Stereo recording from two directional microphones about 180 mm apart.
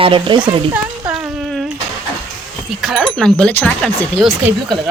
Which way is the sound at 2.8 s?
Centre (ahead or behind).